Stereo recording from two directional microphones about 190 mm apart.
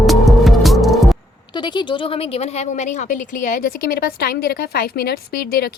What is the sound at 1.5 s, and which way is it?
Speech, 25° left (ahead or behind).